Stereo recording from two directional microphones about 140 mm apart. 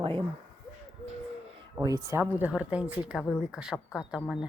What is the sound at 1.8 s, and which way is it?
Speech, 25° right (ahead or behind).